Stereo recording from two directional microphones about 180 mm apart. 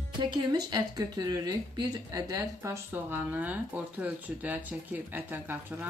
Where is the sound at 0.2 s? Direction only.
25° right (ahead or behind).